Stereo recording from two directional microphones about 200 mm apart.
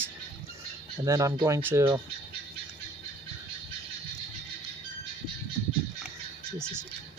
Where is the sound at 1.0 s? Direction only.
15° right (ahead or behind).